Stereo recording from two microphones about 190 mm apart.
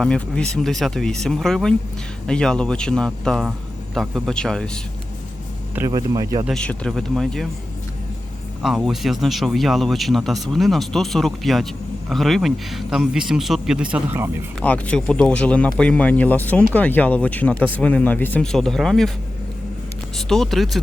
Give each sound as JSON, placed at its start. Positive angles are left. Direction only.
{"t": 0.0, "sound": "speech", "side_deg": 5}
{"t": 5.7, "sound": "speech", "side_deg": -15}
{"t": 6.4, "sound": "speech", "side_deg": 5}
{"t": 8.6, "sound": "speech", "side_deg": 0}
{"t": 14.6, "sound": "speech", "side_deg": 5}
{"t": 20.1, "sound": "speech", "side_deg": 0}